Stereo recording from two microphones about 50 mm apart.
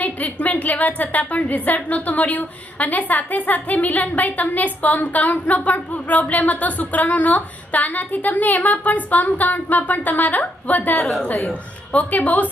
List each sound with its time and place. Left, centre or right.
0.0 s a woman's voice: left